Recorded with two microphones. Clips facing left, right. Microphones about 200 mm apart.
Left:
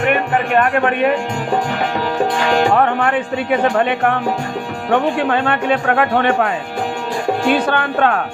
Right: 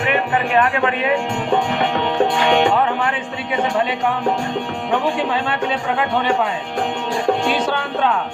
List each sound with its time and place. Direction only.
0.0 s music: 50° left (ahead or behind)
2.1 s music: centre (ahead or behind)
2.7 s speech: 55° left (ahead or behind)
7.5 s speech: 60° left (ahead or behind)